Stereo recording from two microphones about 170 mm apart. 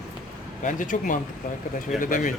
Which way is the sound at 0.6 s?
50° left (ahead or behind).